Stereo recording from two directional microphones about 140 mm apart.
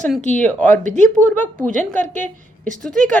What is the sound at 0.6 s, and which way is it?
Speech, 65° right (ahead or behind).